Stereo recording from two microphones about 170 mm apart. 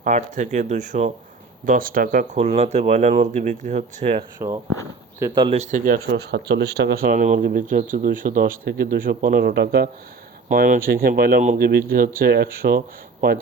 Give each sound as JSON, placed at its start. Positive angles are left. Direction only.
{"t": 0.0, "sound": "speech", "side_deg": -45}
{"t": 4.4, "sound": "speech", "side_deg": -25}
{"t": 5.7, "sound": "speech", "side_deg": -50}
{"t": 6.1, "sound": "speech", "side_deg": -80}
{"t": 10.5, "sound": "speech", "side_deg": -55}